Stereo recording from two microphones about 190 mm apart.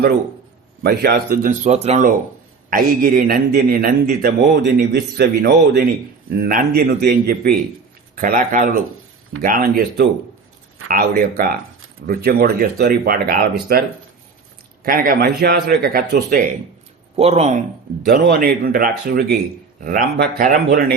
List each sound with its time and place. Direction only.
0.8 s speech: 55° right (ahead or behind)
14.8 s speech: 50° right (ahead or behind)
17.2 s speech: 35° right (ahead or behind)
18.0 s speech: 55° right (ahead or behind)